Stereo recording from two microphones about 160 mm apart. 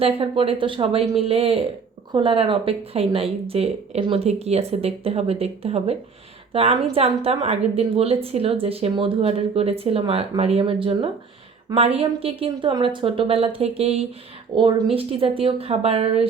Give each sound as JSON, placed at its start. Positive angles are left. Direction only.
{"t": 0.0, "sound": "a woman's voice", "side_deg": -35}